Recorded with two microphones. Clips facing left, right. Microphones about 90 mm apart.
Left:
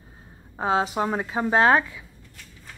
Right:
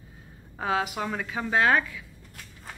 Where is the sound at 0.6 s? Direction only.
30° left (ahead or behind).